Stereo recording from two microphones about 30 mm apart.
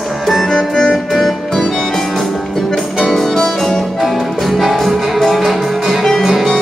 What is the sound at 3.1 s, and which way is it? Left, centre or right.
Music, centre.